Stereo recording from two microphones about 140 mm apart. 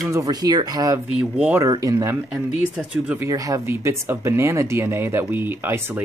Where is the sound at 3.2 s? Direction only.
25° right (ahead or behind).